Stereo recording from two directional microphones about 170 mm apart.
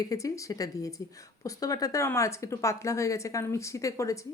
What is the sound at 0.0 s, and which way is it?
A woman's voice, 20° left (ahead or behind).